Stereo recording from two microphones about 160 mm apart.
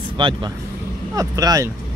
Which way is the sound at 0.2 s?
30° right (ahead or behind).